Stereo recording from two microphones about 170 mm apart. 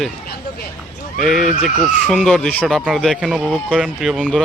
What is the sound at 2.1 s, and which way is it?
Speech, centre (ahead or behind).